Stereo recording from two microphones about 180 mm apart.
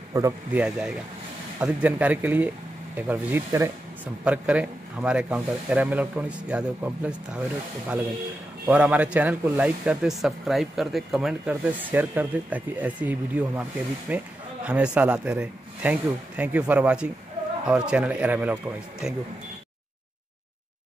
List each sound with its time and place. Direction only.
0.1 s speech: 15° right (ahead or behind)
0.6 s speech: 5° right (ahead or behind)
8.6 s speech: 10° right (ahead or behind)